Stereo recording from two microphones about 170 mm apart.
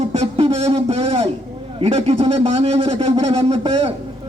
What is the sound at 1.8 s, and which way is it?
A man's voice, 35° right (ahead or behind).